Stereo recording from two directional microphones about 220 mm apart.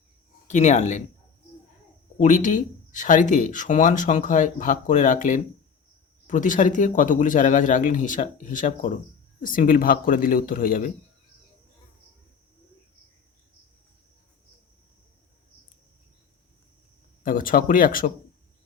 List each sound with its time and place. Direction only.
0.4 s speech: 30° left (ahead or behind)
2.1 s speech: 35° left (ahead or behind)
17.2 s speech: 40° left (ahead or behind)